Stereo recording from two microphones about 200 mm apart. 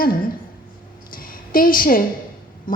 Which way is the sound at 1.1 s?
45° left (ahead or behind).